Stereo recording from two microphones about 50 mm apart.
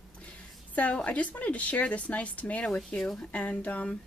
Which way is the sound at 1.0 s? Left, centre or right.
Left.